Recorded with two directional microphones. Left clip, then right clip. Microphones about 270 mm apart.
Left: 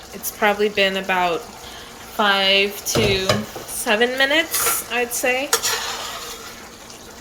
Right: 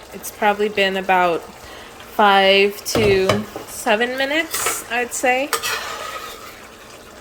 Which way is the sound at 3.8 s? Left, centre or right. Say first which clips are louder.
Left 1 dB; centre.